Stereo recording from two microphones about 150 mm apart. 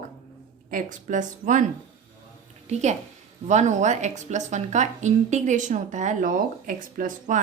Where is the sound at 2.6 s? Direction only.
50° right (ahead or behind).